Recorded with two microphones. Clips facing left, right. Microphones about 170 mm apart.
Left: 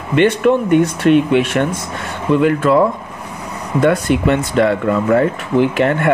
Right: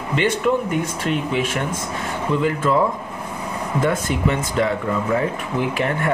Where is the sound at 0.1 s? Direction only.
65° left (ahead or behind).